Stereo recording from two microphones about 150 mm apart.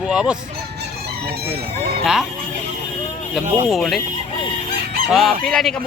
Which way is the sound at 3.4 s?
45° right (ahead or behind).